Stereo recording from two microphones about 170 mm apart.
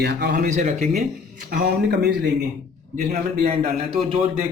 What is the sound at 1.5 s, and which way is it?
Speech, 75° right (ahead or behind).